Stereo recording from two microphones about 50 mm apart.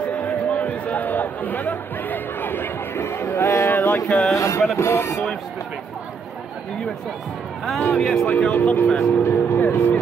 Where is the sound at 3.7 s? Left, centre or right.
Left.